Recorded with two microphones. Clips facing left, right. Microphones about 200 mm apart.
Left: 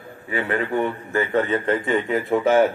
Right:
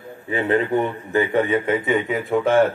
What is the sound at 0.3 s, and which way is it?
A man's voice, 20° right (ahead or behind).